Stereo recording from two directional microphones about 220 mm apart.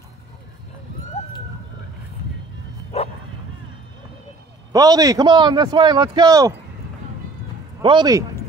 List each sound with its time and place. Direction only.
2.9 s bow-wow: 30° left (ahead or behind)
4.7 s speech: 15° right (ahead or behind)
7.8 s speech: 20° right (ahead or behind)